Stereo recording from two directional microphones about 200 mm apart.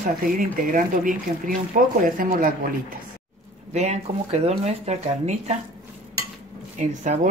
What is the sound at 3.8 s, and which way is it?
Speech, 35° right (ahead or behind).